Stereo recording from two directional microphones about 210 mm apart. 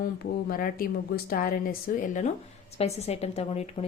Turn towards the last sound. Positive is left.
turn(degrees=30)  # may be behind; listen again after turning